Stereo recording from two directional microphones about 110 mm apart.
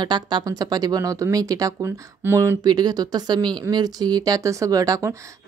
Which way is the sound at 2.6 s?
40° right (ahead or behind).